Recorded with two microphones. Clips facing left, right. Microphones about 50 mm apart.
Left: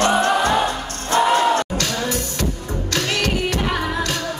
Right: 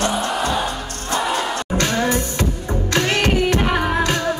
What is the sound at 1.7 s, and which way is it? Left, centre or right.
Music, right.